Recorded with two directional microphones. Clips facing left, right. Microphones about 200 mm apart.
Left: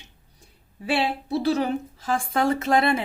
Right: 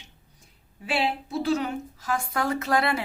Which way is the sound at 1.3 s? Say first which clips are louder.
Left 6 dB; 35° left (ahead or behind).